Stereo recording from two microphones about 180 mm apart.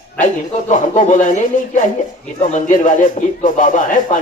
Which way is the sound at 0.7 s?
45° left (ahead or behind).